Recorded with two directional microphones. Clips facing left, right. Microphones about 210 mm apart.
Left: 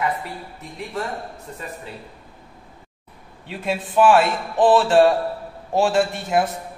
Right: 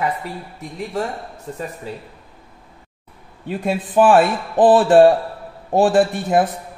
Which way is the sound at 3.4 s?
45° right (ahead or behind).